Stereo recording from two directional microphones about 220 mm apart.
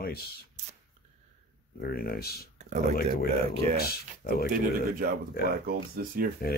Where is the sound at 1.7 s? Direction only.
45° left (ahead or behind).